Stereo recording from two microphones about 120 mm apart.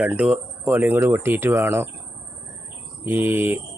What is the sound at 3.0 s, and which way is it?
Speech, 20° right (ahead or behind).